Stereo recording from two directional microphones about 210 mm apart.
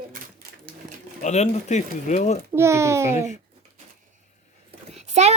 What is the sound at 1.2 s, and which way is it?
Speech, 35° left (ahead or behind).